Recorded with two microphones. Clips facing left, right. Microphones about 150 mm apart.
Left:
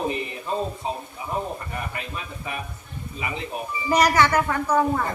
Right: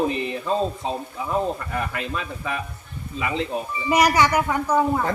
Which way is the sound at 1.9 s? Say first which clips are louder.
Right 5 dB; 90° right.